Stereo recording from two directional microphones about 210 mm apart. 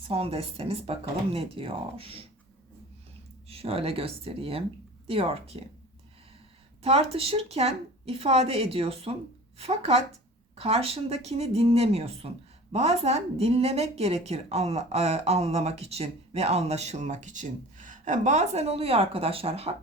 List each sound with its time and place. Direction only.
0.1 s a woman's voice: 25° right (ahead or behind)
3.5 s a woman's voice: 30° right (ahead or behind)
6.8 s a woman's voice: 30° right (ahead or behind)